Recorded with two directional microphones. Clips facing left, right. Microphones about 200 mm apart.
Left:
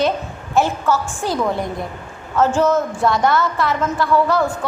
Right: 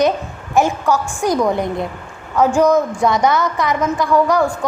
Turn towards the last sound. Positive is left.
turn(degrees=-15)  # may be behind; listen again after turning